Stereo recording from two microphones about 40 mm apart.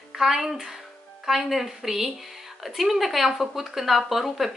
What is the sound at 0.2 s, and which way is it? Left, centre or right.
A woman's voice, centre.